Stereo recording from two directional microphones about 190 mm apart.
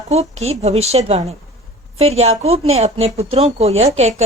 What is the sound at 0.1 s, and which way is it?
A woman's voice, 35° right (ahead or behind).